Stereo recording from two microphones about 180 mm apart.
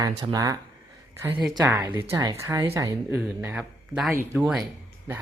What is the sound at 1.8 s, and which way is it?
Speech, 20° right (ahead or behind).